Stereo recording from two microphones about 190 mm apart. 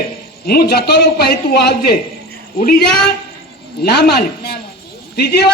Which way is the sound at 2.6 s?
45° left (ahead or behind).